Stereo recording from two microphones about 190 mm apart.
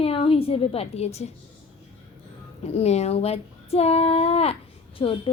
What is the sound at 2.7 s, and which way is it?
A woman's voice, 35° left (ahead or behind).